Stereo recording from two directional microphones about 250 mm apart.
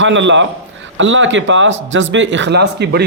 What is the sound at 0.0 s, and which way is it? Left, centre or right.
A man's voice, right.